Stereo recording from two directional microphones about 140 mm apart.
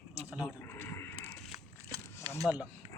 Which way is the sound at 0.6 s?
15° left (ahead or behind).